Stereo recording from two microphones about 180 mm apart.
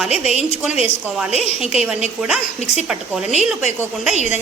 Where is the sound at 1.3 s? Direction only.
35° left (ahead or behind).